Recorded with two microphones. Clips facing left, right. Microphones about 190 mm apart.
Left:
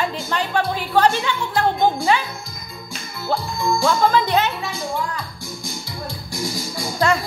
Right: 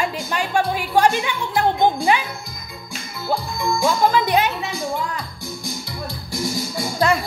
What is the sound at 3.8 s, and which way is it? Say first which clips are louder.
Speech: even; 15° right (ahead or behind).